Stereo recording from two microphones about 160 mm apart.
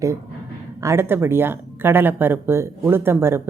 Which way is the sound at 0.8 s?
15° right (ahead or behind).